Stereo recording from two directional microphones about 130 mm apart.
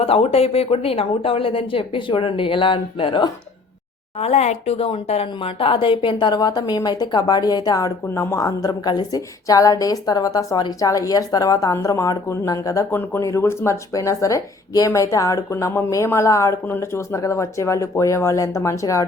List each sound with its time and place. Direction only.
0.0 s speech: 50° left (ahead or behind)
4.2 s speech: 55° left (ahead or behind); by 19.0 s 25° left (ahead or behind)